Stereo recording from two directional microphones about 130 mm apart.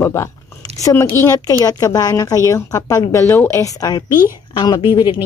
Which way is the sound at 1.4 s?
30° left (ahead or behind).